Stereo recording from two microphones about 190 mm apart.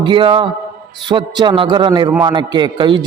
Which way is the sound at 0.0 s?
25° right (ahead or behind).